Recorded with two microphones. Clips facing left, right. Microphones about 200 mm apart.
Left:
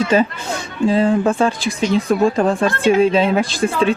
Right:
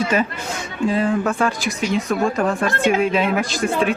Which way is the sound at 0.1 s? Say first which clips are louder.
Left 5 dB; 30° left (ahead or behind).